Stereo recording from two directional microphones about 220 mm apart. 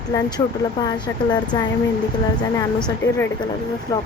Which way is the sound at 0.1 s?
20° left (ahead or behind).